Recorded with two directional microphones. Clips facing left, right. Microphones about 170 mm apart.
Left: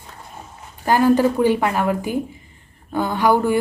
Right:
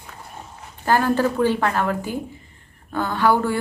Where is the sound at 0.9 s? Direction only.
15° left (ahead or behind).